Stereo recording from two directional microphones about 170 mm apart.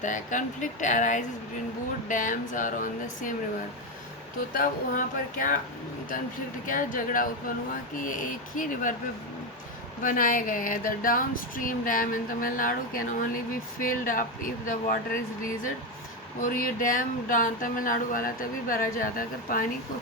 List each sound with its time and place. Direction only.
0.0 s speech: 50° left (ahead or behind)
4.5 s speech: 50° left (ahead or behind)
6.7 s speech: 50° left (ahead or behind)
10.0 s speech: 55° left (ahead or behind)
16.4 s speech: 55° left (ahead or behind)